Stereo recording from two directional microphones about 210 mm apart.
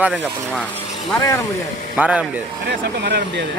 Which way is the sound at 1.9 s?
5° right (ahead or behind).